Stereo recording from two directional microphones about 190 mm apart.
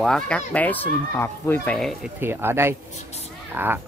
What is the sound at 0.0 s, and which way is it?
Speech, 5° left (ahead or behind).